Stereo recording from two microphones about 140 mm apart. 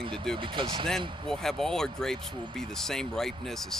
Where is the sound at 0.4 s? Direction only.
35° right (ahead or behind).